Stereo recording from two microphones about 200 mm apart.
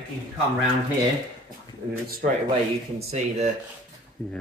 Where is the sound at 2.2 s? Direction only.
45° right (ahead or behind).